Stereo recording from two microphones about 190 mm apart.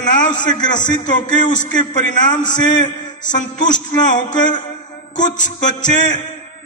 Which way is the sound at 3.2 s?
40° left (ahead or behind).